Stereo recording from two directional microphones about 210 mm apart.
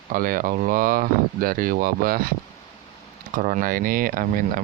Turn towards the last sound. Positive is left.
turn(degrees=-40)  # may be behind; listen again after turning